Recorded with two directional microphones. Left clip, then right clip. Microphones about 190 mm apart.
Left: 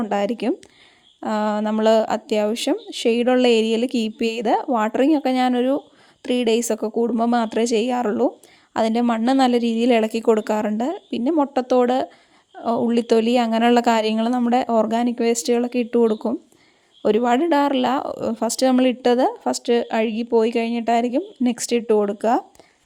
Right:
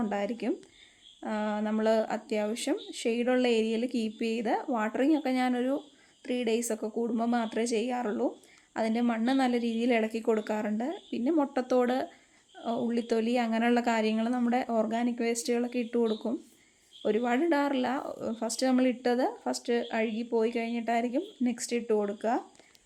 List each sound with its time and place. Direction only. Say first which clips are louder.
0.0 s speech: left 10 dB; 45° left (ahead or behind)